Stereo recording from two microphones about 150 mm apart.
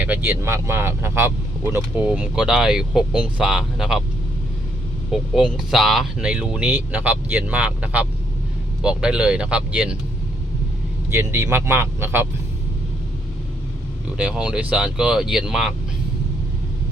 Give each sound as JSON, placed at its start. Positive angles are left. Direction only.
{"t": 0.0, "sound": "speech", "side_deg": -10}
{"t": 2.0, "sound": "speech", "side_deg": -5}
{"t": 5.1, "sound": "speech", "side_deg": -5}
{"t": 11.1, "sound": "speech", "side_deg": -15}
{"t": 14.2, "sound": "speech", "side_deg": -5}